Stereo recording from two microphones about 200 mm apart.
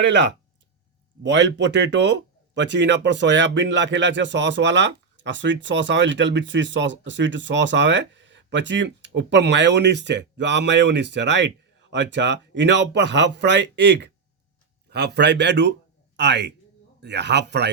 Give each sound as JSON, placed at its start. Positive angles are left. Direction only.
{"t": 0.0, "sound": "speech", "side_deg": -65}